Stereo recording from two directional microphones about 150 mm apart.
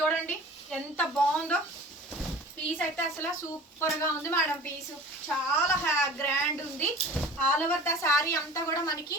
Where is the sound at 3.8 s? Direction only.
20° left (ahead or behind).